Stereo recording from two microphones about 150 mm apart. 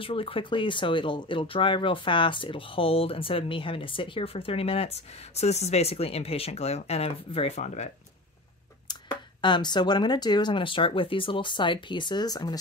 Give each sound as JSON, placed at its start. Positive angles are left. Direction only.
{"t": 0.0, "sound": "speech", "side_deg": 35}
{"t": 8.8, "sound": "speech", "side_deg": 30}